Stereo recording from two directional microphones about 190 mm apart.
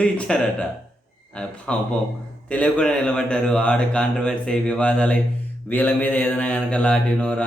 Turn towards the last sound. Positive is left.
turn(degrees=5)  # may be behind; listen again after turning